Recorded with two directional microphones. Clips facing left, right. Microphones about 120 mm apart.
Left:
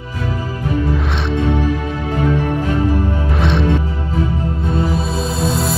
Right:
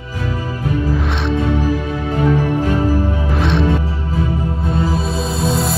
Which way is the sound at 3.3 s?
Centre (ahead or behind).